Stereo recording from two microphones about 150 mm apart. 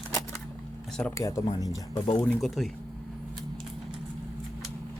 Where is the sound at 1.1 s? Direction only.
20° left (ahead or behind).